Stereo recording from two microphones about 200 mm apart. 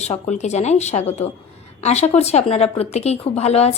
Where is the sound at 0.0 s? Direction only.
35° left (ahead or behind).